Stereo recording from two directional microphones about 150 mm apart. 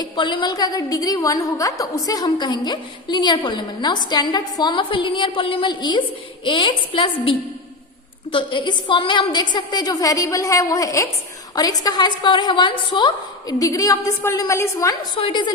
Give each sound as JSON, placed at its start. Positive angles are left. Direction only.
{"t": 0.0, "sound": "a woman's voice", "side_deg": 30}
{"t": 15.1, "sound": "a woman's voice", "side_deg": 35}